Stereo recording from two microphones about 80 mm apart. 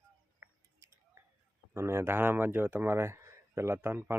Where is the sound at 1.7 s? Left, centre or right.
Right.